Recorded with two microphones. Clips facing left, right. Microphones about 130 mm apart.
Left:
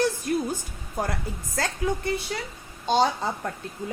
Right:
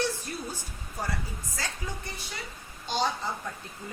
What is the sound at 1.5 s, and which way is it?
Speech, 55° left (ahead or behind).